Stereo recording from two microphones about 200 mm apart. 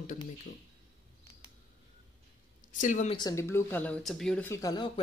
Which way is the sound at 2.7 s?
40° left (ahead or behind).